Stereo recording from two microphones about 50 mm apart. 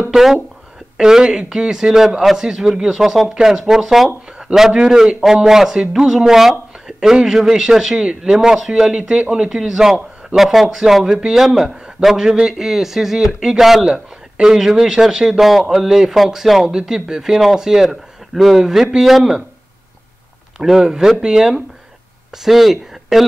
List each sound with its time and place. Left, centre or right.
0.1 s speech: centre
6.9 s a sound: centre
7.2 s speech: centre
13.8 s a man's voice: centre
20.5 s a man's voice: centre
20.8 s speech: centre